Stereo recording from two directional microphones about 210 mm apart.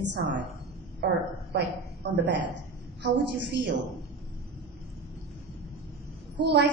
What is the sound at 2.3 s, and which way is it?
A woman's voice, 55° right (ahead or behind).